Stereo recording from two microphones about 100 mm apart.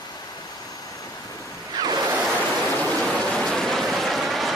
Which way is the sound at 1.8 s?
40° right (ahead or behind).